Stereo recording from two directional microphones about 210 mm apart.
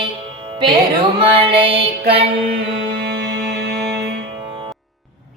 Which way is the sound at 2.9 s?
55° right (ahead or behind).